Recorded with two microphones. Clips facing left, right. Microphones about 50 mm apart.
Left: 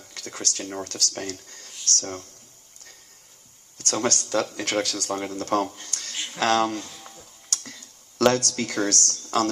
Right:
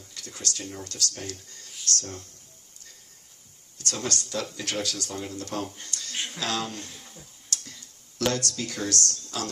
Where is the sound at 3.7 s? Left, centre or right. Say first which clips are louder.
Left 6 dB; left.